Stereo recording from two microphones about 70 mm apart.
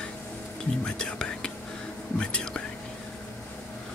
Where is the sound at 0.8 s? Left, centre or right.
Centre.